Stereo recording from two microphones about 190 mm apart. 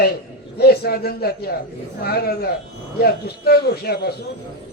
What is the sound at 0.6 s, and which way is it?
A man's voice, 55° left (ahead or behind).